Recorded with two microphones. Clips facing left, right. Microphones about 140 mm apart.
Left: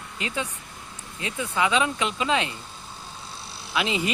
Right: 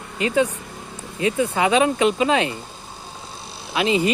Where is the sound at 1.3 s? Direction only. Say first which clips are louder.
Right 6 dB; 55° right (ahead or behind).